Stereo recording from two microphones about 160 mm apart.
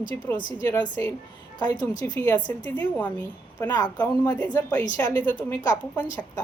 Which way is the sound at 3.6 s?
20° left (ahead or behind).